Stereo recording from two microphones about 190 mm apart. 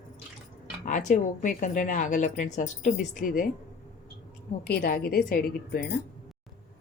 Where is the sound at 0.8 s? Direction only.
40° left (ahead or behind).